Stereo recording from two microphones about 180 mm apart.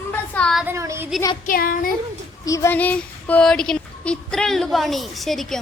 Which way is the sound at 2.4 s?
15° left (ahead or behind).